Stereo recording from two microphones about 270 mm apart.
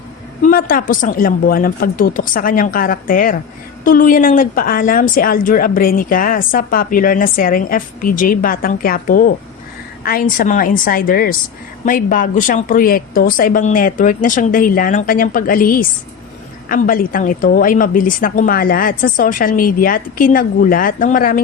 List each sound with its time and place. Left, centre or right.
0.4 s speech: left